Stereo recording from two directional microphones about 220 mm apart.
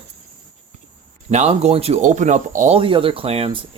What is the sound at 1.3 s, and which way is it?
Speech, 30° right (ahead or behind).